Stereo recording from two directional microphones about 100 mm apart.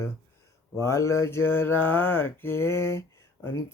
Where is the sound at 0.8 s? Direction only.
30° left (ahead or behind).